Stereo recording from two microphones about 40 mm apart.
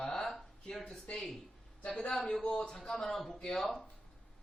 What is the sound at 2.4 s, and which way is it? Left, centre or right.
Speech, left.